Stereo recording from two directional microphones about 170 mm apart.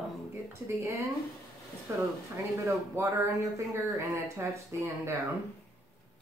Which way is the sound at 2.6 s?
15° right (ahead or behind).